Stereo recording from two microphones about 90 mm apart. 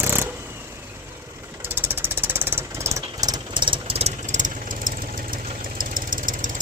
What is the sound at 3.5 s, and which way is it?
Engine, 70° right (ahead or behind).